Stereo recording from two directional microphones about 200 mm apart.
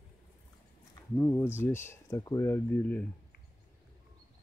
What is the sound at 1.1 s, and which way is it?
Speech, 10° left (ahead or behind).